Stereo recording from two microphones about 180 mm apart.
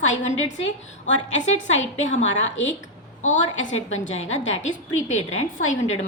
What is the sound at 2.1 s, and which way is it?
Speech, 90° left.